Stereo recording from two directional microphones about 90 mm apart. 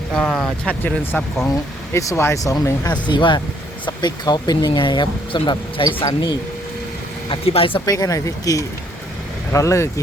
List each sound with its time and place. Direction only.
0.1 s speech: 5° left (ahead or behind)
0.7 s speech: 20° left (ahead or behind)
1.9 s speech: 35° left (ahead or behind)
2.9 s speech: 60° left (ahead or behind)
3.8 s speech: 50° left (ahead or behind)
7.3 s speech: 90° left
7.9 s speech: 40° left (ahead or behind)